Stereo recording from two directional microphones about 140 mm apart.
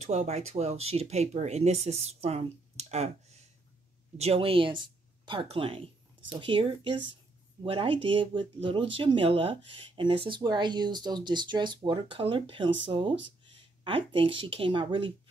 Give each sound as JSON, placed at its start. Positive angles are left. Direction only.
{"t": 0.0, "sound": "speech", "side_deg": -50}